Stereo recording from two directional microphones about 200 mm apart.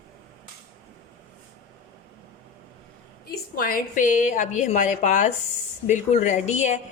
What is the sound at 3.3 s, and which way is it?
A woman's voice, 45° left (ahead or behind).